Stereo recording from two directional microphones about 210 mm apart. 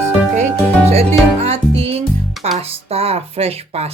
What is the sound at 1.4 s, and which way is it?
Music, 30° right (ahead or behind).